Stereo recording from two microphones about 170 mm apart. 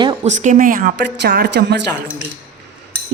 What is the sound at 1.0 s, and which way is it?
Speech, 70° right (ahead or behind).